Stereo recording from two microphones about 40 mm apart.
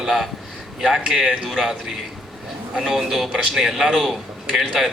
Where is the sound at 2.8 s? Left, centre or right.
Centre.